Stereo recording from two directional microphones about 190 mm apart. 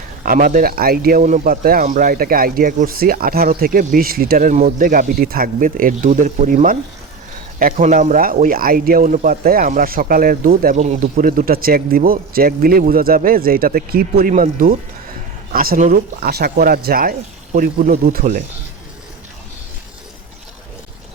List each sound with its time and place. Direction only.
0.3 s speech: 50° right (ahead or behind)
11.3 s speech: 50° right (ahead or behind)